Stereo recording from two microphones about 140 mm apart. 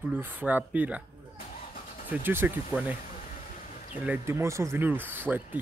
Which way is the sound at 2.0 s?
15° right (ahead or behind).